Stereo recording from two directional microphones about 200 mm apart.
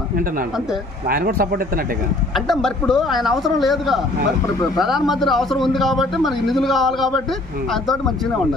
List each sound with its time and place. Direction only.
1.0 s speech: 45° right (ahead or behind)
2.3 s a man's voice: centre (ahead or behind)